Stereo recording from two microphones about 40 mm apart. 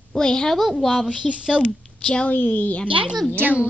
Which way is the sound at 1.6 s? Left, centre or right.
Left.